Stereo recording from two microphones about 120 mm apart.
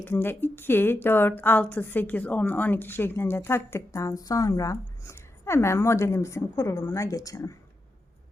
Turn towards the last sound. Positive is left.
turn(degrees=25)  # may be behind; listen again after turning